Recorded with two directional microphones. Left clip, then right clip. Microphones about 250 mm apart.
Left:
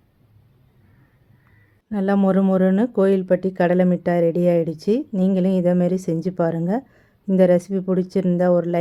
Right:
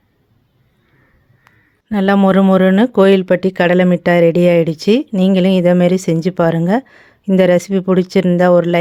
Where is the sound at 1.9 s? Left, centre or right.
Centre.